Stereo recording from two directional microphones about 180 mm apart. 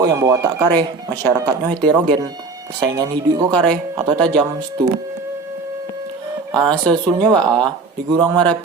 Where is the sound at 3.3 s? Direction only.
25° right (ahead or behind).